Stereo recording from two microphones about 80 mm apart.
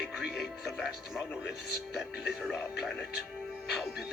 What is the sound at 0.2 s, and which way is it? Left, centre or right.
Speech, centre.